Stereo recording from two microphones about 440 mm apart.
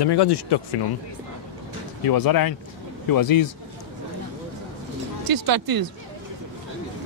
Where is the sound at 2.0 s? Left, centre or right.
Left.